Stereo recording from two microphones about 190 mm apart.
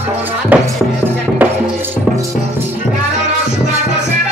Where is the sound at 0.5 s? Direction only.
10° right (ahead or behind).